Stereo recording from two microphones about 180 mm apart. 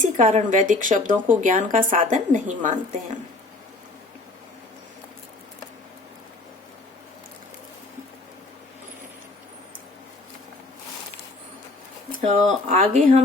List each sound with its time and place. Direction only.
0.0 s a woman's voice: 45° right (ahead or behind)
12.2 s speech: 40° right (ahead or behind)